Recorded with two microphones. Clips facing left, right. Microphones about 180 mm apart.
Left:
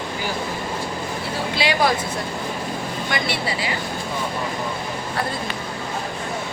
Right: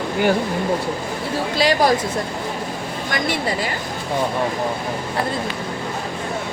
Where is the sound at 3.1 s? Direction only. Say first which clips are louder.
Right 4 dB; 45° right (ahead or behind).